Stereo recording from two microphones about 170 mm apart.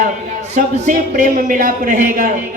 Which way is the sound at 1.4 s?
50° right (ahead or behind).